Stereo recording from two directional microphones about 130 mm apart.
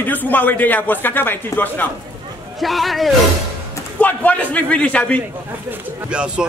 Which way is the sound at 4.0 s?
10° left (ahead or behind).